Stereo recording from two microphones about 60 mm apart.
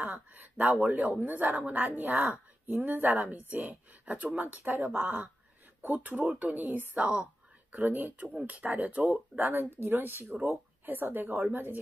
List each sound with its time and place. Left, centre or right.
0.0 s speech: right
9.5 s speech: right